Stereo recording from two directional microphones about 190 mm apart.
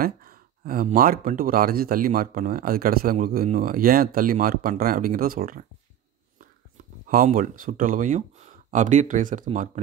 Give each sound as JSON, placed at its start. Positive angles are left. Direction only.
{"t": 0.0, "sound": "speech", "side_deg": -50}
{"t": 7.1, "sound": "speech", "side_deg": -45}